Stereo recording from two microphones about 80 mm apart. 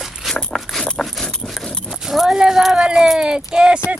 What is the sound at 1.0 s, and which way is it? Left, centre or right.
Dog, centre.